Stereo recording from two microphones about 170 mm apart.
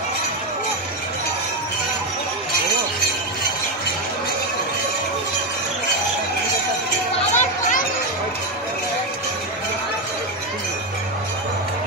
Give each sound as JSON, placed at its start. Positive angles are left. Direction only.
{"t": 7.3, "sound": "chatter", "side_deg": 50}